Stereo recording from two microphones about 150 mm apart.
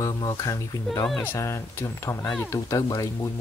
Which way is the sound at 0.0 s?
25° left (ahead or behind).